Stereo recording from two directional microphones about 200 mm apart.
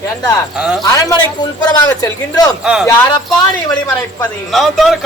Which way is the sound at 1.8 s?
20° left (ahead or behind).